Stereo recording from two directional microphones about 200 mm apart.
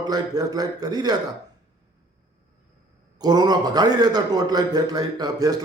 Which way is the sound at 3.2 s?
20° right (ahead or behind).